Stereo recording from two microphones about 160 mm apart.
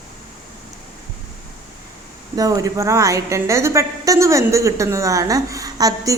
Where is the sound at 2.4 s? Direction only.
20° right (ahead or behind).